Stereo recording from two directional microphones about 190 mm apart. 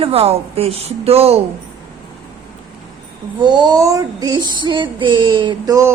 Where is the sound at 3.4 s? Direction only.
25° right (ahead or behind).